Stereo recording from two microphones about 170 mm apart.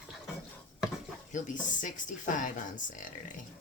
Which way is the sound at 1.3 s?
50° left (ahead or behind).